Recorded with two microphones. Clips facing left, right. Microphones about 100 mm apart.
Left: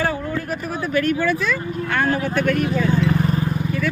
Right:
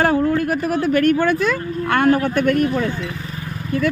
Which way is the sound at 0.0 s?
65° right (ahead or behind).